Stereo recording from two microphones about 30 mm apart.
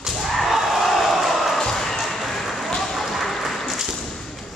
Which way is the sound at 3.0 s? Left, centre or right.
Centre.